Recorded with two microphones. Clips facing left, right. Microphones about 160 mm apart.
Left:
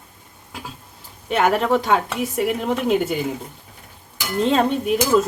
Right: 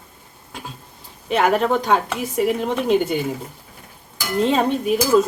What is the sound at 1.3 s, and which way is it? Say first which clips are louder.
Speech: even; centre (ahead or behind).